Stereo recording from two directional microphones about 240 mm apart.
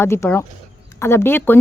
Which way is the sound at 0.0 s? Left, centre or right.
Centre.